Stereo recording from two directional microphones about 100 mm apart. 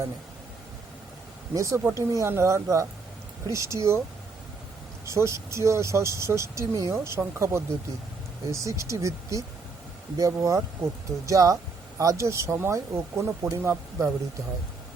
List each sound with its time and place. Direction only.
1.5 s speech: 30° right (ahead or behind)
5.0 s speech: 30° right (ahead or behind)